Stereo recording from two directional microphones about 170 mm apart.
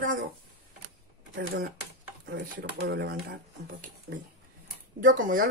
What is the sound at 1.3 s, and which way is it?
Speech, 60° right (ahead or behind).